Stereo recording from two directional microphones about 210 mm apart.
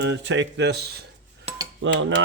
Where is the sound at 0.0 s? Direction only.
60° right (ahead or behind).